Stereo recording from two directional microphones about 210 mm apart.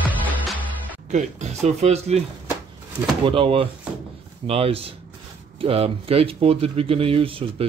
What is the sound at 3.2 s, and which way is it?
Speech, 25° right (ahead or behind).